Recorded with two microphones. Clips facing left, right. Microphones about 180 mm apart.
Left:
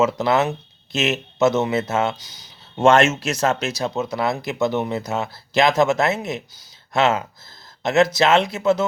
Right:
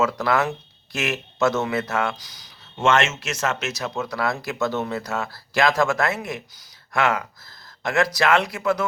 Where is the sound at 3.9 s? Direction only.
20° left (ahead or behind).